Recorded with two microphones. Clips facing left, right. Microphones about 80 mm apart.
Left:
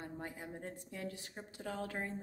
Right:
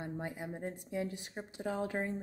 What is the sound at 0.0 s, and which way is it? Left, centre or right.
Speech, centre.